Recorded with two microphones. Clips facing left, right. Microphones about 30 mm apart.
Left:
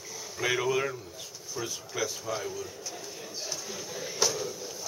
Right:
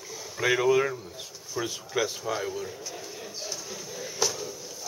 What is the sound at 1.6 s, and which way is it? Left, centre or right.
Speech, right.